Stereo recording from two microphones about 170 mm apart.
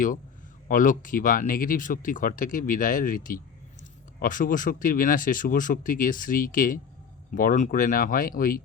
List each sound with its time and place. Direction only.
0.7 s speech: 50° left (ahead or behind)